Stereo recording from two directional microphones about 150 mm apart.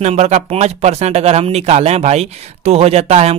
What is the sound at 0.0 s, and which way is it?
Speech, 50° right (ahead or behind).